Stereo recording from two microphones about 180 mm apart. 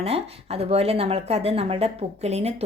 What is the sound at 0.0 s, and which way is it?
Speech, 35° right (ahead or behind).